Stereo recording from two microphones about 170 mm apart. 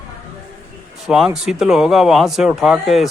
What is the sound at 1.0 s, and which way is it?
Speech, centre (ahead or behind).